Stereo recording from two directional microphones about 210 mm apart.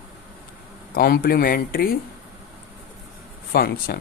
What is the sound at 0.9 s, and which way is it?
Speech, 45° left (ahead or behind).